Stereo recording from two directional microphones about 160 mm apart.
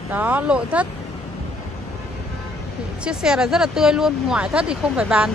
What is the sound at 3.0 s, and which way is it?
Speech, 5° right (ahead or behind).